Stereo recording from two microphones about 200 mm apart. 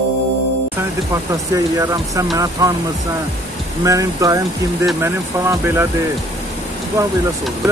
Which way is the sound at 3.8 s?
15° right (ahead or behind).